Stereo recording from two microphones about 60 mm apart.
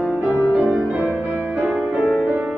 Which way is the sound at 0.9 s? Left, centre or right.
Centre.